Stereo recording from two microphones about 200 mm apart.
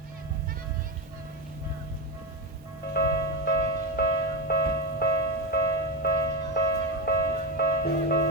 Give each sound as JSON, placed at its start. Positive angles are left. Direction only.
{"t": 2.9, "sound": "music", "side_deg": 55}